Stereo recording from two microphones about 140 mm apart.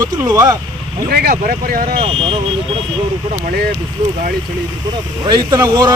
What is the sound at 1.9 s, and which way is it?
Speech, 40° right (ahead or behind).